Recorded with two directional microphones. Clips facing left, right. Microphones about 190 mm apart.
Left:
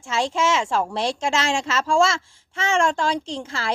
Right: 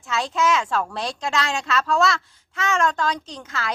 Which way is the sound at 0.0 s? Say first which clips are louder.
Left 1 dB; 25° left (ahead or behind).